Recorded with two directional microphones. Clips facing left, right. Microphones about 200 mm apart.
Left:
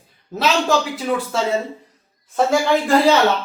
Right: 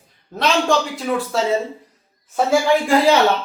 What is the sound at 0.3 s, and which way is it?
A man's voice, 5° left (ahead or behind).